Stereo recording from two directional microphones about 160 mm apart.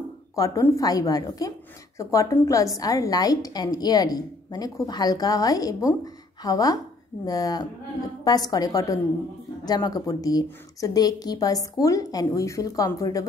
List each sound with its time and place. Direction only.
0.4 s a woman's voice: 20° left (ahead or behind)